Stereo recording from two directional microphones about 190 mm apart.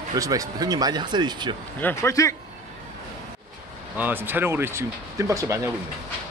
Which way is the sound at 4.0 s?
10° right (ahead or behind).